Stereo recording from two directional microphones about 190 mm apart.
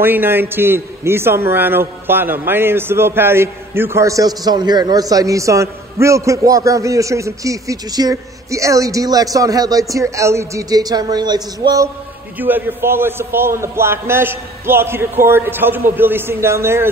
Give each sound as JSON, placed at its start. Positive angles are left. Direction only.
{"t": 0.0, "sound": "a man's voice", "side_deg": -10}